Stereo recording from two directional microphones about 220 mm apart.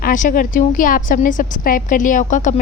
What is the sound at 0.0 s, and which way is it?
A woman's voice, 35° left (ahead or behind).